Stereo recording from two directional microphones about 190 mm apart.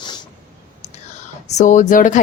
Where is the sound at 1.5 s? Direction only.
40° left (ahead or behind).